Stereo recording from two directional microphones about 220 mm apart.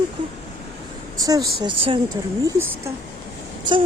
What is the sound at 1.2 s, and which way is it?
Speech, 15° right (ahead or behind).